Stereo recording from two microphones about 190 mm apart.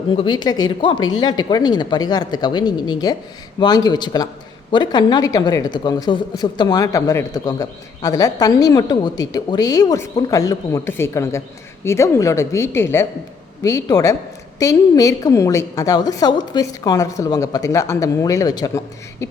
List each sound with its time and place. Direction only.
0.1 s a woman's voice: 25° left (ahead or behind)